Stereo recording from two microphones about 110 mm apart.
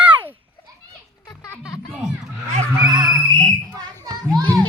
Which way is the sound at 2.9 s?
35° right (ahead or behind).